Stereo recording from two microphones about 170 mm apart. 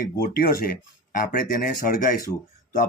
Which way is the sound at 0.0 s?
60° left (ahead or behind).